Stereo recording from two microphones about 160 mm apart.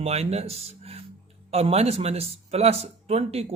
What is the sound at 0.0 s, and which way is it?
A man's voice, 40° right (ahead or behind).